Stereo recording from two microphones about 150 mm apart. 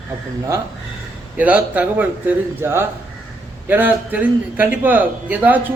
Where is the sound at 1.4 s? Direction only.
10° right (ahead or behind).